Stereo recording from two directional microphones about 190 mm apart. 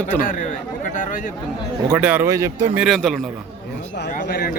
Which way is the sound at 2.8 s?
Centre (ahead or behind).